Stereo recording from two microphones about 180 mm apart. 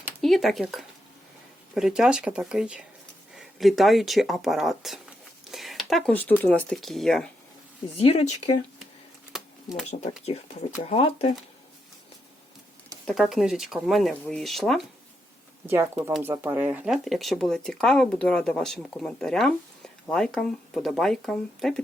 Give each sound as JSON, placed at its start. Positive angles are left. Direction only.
{"t": 0.2, "sound": "speech", "side_deg": 0}
{"t": 5.5, "sound": "a sound", "side_deg": 0}
{"t": 6.4, "sound": "speech", "side_deg": 10}
{"t": 7.9, "sound": "speech", "side_deg": 35}
{"t": 9.3, "sound": "a sound", "side_deg": 0}
{"t": 10.2, "sound": "speech", "side_deg": 35}
{"t": 13.1, "sound": "speech", "side_deg": 0}
{"t": 15.6, "sound": "speech", "side_deg": -15}